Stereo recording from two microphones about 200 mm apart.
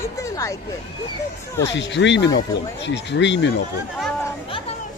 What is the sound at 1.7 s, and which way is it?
Speech, 60° left (ahead or behind).